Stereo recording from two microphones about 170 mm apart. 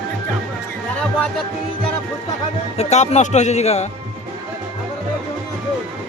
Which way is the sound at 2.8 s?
40° left (ahead or behind).